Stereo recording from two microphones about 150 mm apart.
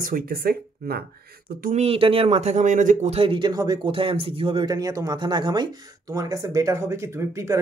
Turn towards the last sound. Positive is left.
turn(degrees=-20)  # may be behind; listen again after turning